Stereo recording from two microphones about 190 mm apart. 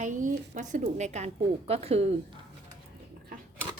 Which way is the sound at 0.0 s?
40° right (ahead or behind).